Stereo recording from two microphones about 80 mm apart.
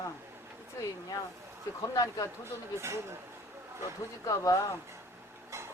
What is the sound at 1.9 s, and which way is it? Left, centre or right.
Speech, left.